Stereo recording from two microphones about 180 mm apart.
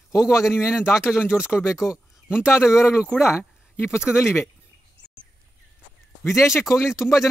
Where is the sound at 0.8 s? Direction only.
15° left (ahead or behind).